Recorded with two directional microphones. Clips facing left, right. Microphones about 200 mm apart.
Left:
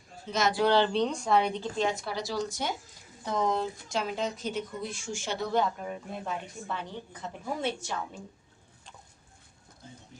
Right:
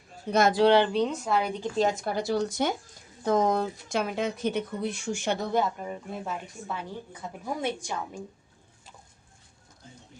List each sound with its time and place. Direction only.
0.3 s speech: 55° right (ahead or behind)
0.6 s a woman's voice: 20° right (ahead or behind)
1.0 s a woman's voice: 5° right (ahead or behind)
1.7 s speech: 40° right (ahead or behind); by 5.4 s 60° right (ahead or behind)
5.5 s a woman's voice: centre (ahead or behind)